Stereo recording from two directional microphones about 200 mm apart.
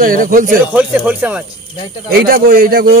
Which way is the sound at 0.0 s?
45° right (ahead or behind).